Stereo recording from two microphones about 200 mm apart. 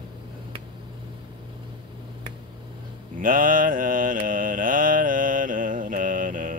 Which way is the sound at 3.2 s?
45° right (ahead or behind).